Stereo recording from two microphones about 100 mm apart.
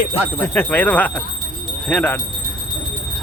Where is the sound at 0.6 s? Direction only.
15° left (ahead or behind).